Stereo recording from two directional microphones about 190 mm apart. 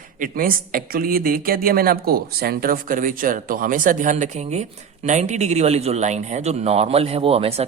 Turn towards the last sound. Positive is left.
turn(degrees=-30)  # may be behind; listen again after turning